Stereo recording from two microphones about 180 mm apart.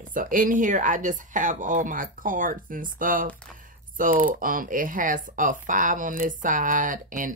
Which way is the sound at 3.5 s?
50° right (ahead or behind).